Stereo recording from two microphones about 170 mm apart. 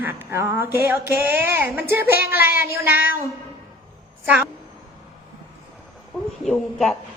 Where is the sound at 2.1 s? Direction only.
65° left (ahead or behind).